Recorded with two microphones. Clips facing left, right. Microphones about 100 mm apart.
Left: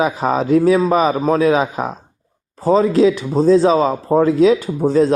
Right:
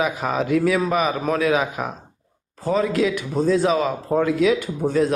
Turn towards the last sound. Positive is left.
turn(degrees=30)  # may be behind; listen again after turning